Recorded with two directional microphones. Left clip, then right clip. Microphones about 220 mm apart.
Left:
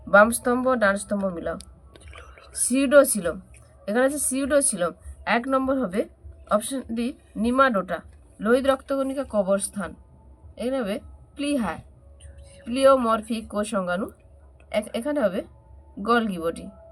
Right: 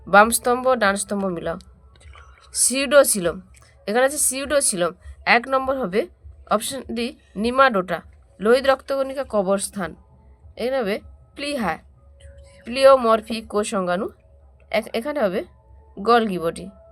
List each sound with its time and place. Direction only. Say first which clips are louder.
0.1 s a woman's voice: right 2 dB; 50° right (ahead or behind)